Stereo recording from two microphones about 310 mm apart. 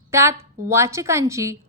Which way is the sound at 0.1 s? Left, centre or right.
Centre.